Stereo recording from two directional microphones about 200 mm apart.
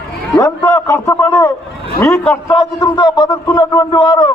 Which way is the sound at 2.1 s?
Centre (ahead or behind).